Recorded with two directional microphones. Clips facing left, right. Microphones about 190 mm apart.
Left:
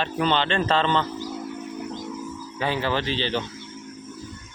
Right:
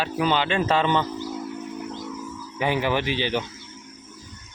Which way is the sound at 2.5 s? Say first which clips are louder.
Right 2 dB; 15° right (ahead or behind).